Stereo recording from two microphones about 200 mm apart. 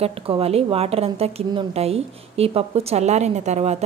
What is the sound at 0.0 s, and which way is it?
A woman's voice, 30° right (ahead or behind).